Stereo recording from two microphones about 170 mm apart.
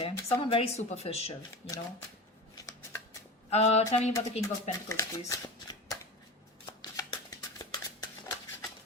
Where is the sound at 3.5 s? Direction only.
40° left (ahead or behind).